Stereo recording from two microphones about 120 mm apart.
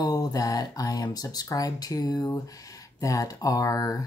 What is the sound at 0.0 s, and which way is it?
Speech, 30° left (ahead or behind).